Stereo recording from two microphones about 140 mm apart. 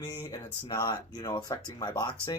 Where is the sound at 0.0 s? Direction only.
30° left (ahead or behind).